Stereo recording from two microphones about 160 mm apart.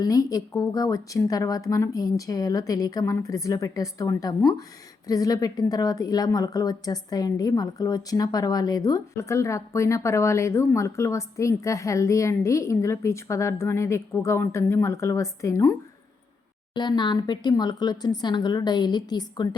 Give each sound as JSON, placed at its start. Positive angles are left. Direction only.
{"t": 0.0, "sound": "a woman's voice", "side_deg": 20}
{"t": 16.7, "sound": "a woman's voice", "side_deg": 30}